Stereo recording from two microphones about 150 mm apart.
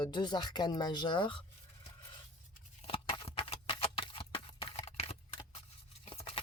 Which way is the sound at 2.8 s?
35° left (ahead or behind).